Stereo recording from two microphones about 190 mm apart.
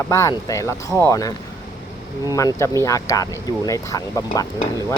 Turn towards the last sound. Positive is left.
turn(degrees=20)  # may be behind; listen again after turning